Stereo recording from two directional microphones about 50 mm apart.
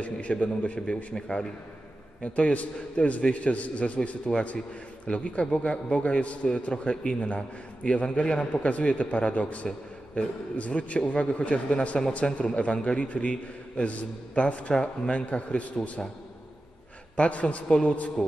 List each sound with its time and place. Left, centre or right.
0.0 s a man's voice: left
17.2 s a man's voice: left